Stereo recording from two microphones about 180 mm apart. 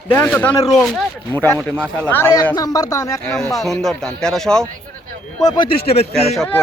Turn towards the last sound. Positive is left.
turn(degrees=5)  # may be behind; listen again after turning